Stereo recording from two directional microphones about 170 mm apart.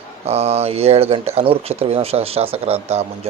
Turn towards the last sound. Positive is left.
turn(degrees=-40)  # may be behind; listen again after turning